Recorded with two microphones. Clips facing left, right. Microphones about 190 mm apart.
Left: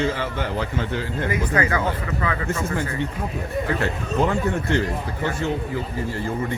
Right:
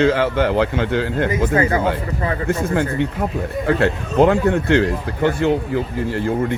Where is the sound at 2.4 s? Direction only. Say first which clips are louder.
Right 6 dB; 60° right (ahead or behind).